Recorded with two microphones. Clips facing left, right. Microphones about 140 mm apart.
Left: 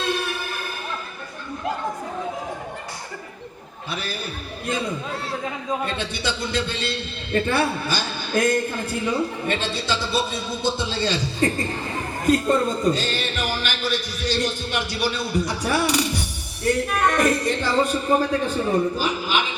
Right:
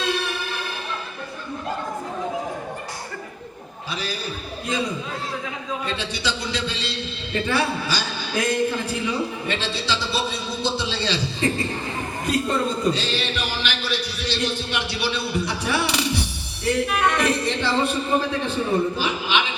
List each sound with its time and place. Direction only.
5.8 s a man's voice: 50° left (ahead or behind)